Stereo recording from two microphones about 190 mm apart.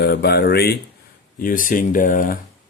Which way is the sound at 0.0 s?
60° left (ahead or behind).